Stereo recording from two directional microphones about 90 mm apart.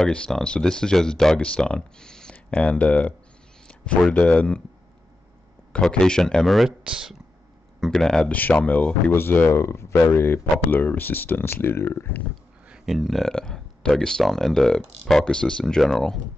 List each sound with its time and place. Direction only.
0.0 s speech: 5° left (ahead or behind)
5.7 s speech: 10° left (ahead or behind)
7.8 s speech: 5° left (ahead or behind)
8.4 s speech: 20° left (ahead or behind)
12.6 s speech: 5° right (ahead or behind)